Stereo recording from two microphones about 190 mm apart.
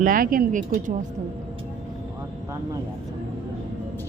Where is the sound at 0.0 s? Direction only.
45° right (ahead or behind).